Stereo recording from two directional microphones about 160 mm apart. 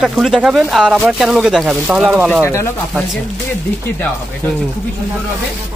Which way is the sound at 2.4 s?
15° left (ahead or behind).